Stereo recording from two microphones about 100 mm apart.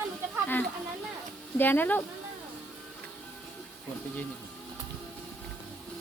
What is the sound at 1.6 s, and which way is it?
Speech, 20° left (ahead or behind).